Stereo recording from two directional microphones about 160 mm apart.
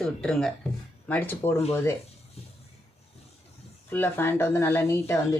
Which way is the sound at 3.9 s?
15° left (ahead or behind).